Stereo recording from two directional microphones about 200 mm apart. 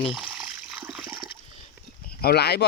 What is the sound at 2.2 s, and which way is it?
Speech, 50° left (ahead or behind).